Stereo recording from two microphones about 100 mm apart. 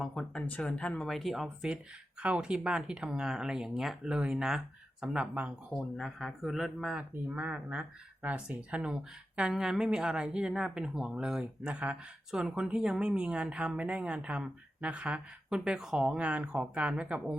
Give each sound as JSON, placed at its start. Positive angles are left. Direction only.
{"t": 0.0, "sound": "speech", "side_deg": 5}